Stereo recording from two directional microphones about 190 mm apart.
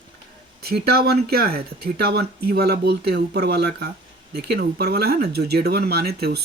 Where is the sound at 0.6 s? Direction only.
55° right (ahead or behind).